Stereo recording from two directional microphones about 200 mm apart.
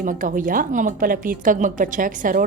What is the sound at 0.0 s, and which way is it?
Speech, 40° right (ahead or behind).